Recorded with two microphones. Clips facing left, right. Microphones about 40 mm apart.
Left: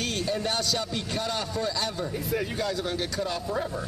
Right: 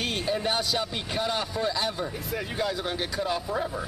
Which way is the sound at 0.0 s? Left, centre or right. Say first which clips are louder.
Right 1 dB; centre.